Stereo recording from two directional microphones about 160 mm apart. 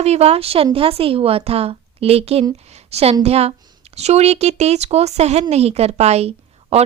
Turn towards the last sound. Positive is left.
turn(degrees=-40)  # may be behind; listen again after turning